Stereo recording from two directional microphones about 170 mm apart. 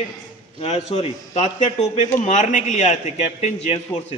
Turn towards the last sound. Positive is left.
turn(degrees=35)  # may be behind; listen again after turning